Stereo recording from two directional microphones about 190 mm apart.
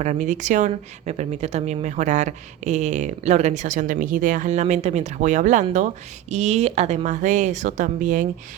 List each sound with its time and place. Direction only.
0.0 s speech: 40° right (ahead or behind)